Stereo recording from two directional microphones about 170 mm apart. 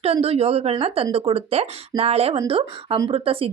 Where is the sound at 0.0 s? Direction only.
35° right (ahead or behind).